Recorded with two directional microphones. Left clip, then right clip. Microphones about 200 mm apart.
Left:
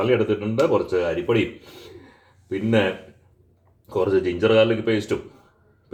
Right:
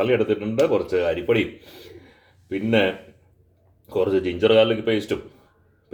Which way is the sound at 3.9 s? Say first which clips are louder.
Left 1 dB; centre (ahead or behind).